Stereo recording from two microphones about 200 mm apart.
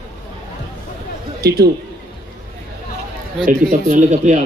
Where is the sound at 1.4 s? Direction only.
50° right (ahead or behind).